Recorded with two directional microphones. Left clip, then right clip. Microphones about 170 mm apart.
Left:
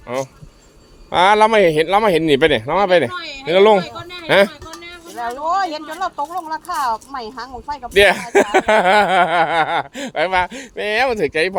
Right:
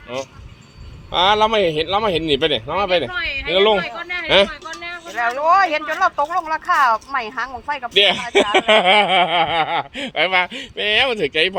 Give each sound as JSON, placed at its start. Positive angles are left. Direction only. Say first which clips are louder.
{"t": 1.1, "sound": "speech", "louder": "left 3 dB", "side_deg": 35}
{"t": 5.4, "sound": "speech", "louder": "right 5 dB", "side_deg": -5}
{"t": 8.1, "sound": "speech", "louder": "left 1 dB", "side_deg": 25}